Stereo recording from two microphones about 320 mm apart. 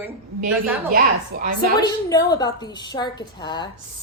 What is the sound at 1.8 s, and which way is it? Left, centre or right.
A woman's voice, centre.